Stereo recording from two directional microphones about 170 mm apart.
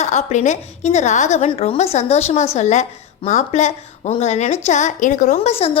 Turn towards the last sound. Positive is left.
turn(degrees=35)  # may be behind; listen again after turning